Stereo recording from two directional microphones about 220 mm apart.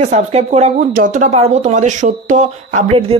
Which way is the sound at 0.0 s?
30° right (ahead or behind).